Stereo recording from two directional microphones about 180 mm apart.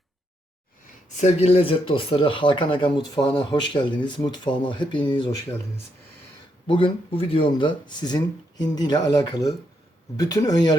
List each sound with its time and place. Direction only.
1.1 s speech: 40° left (ahead or behind)
6.7 s speech: 30° left (ahead or behind)